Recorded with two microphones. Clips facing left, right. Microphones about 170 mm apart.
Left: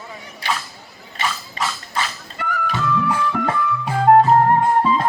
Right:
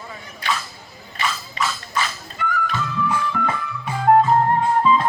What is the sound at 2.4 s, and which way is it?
Music, 60° left (ahead or behind).